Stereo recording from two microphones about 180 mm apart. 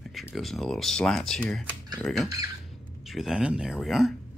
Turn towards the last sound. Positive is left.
turn(degrees=0)  # may be behind; listen again after turning